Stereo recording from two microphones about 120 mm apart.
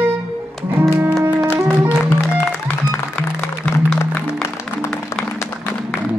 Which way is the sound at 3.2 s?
10° left (ahead or behind).